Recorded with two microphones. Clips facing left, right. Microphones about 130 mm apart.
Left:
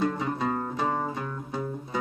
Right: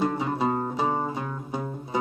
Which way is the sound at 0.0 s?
15° right (ahead or behind).